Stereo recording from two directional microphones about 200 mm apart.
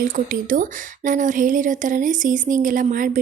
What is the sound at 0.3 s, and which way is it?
A woman's voice, 40° right (ahead or behind).